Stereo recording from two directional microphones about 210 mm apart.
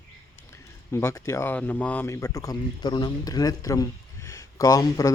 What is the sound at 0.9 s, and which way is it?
A man's voice, 15° left (ahead or behind).